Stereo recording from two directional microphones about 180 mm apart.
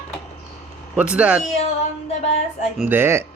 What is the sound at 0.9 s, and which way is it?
Music, 5° right (ahead or behind).